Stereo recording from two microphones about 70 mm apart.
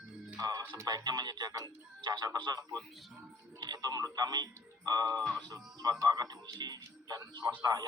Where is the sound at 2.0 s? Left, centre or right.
Right.